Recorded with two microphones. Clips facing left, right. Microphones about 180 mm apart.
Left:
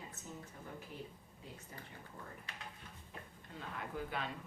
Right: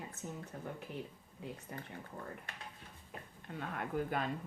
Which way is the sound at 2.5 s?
55° right (ahead or behind).